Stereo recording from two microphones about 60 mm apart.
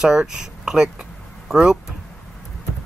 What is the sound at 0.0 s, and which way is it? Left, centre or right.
Speech, centre.